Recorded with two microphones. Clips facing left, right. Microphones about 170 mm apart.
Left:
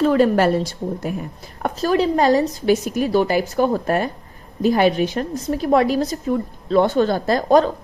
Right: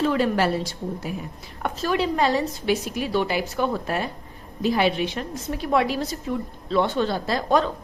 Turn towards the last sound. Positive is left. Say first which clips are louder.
# left 6 dB
turn(degrees=45)  # may be behind; listen again after turning